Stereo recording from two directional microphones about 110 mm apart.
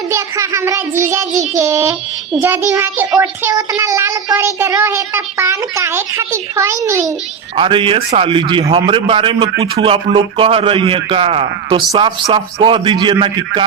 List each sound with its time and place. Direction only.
0.1 s a woman's voice: 25° right (ahead or behind)
3.5 s child singing: 35° right (ahead or behind)
4.8 s a woman's voice: 20° right (ahead or behind)
7.5 s a man's voice: 50° right (ahead or behind)
11.9 s a man's voice: 45° right (ahead or behind)